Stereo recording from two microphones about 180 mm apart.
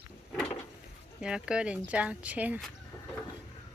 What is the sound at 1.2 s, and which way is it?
Speech, 5° right (ahead or behind).